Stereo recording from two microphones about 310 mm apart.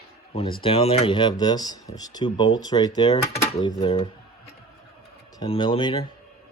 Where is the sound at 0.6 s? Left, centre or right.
Centre.